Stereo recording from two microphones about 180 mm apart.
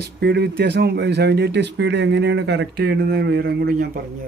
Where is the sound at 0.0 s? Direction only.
65° right (ahead or behind).